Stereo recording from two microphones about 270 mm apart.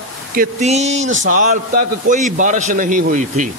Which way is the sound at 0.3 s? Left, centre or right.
Right.